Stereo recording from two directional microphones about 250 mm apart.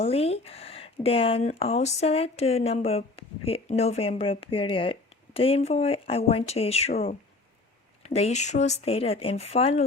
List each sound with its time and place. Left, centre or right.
0.0 s speech: left
8.0 s speech: left